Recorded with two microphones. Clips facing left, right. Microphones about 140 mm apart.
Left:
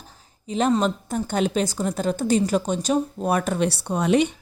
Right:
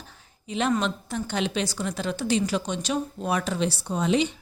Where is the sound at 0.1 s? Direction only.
40° left (ahead or behind).